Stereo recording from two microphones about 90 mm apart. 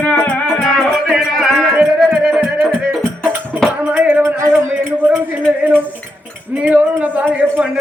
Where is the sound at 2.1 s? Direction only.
10° right (ahead or behind).